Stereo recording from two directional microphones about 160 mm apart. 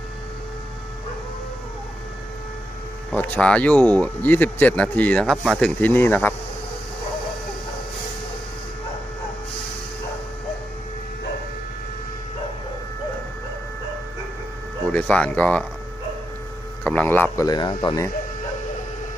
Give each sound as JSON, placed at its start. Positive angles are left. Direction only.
{"t": 3.1, "sound": "speech", "side_deg": 10}
{"t": 14.9, "sound": "speech", "side_deg": 10}
{"t": 16.8, "sound": "speech", "side_deg": 10}
{"t": 17.4, "sound": "speech", "side_deg": 25}